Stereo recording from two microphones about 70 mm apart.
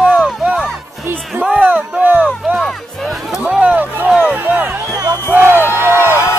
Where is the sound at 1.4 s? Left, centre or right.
Centre.